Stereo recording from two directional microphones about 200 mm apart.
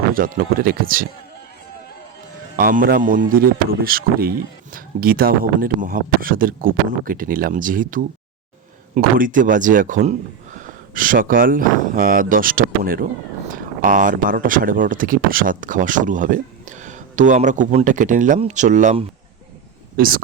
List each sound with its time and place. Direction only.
0.1 s speech: 45° right (ahead or behind)
2.6 s speech: 45° right (ahead or behind)